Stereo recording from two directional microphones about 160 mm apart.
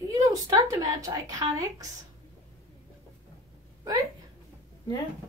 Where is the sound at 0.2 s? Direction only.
20° right (ahead or behind).